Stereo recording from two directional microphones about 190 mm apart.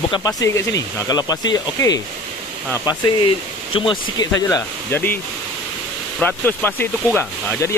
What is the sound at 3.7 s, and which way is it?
Speech, 25° left (ahead or behind).